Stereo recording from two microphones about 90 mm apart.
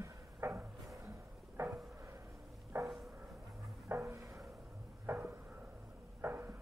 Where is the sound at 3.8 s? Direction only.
30° right (ahead or behind).